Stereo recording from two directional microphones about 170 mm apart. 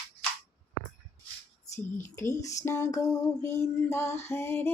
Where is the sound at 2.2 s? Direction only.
20° left (ahead or behind).